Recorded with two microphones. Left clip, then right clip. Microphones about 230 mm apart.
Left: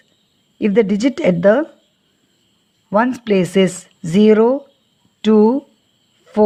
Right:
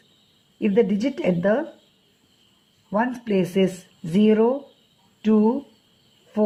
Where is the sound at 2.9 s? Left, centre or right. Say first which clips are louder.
Left 8 dB; left.